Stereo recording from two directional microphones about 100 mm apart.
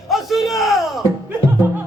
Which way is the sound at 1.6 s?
15° right (ahead or behind).